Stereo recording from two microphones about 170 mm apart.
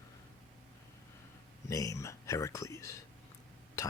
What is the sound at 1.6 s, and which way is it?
Speech, 20° left (ahead or behind).